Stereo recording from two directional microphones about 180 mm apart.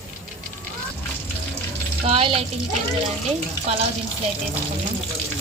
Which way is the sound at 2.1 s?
30° right (ahead or behind).